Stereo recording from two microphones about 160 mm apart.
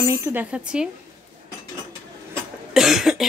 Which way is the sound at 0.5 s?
5° right (ahead or behind).